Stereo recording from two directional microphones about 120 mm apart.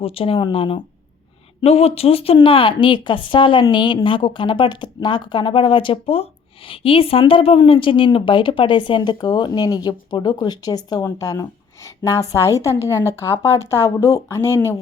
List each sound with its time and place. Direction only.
0.0 s speech: 50° left (ahead or behind)
1.6 s a woman's voice: 60° left (ahead or behind); by 14.5 s 25° left (ahead or behind)